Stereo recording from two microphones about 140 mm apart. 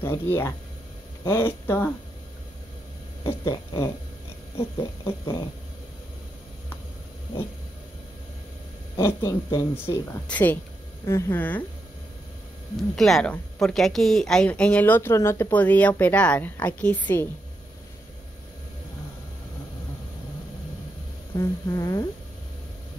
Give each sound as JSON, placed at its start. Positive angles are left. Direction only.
{"t": 0.0, "sound": "speech", "side_deg": 15}
{"t": 3.3, "sound": "speech", "side_deg": 25}
{"t": 5.0, "sound": "speech", "side_deg": 20}
{"t": 8.9, "sound": "speech", "side_deg": 20}
{"t": 12.9, "sound": "speech", "side_deg": 0}
{"t": 21.4, "sound": "speech", "side_deg": 20}